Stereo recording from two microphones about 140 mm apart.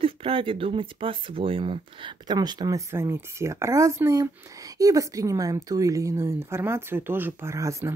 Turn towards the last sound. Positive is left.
turn(degrees=-20)  # may be behind; listen again after turning